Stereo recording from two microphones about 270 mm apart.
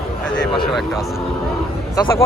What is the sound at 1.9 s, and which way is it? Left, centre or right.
Speech, centre.